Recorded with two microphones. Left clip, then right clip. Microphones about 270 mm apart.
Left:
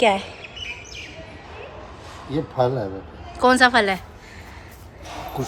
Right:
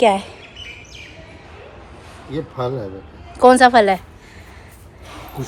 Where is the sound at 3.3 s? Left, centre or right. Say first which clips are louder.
Right 5 dB; centre.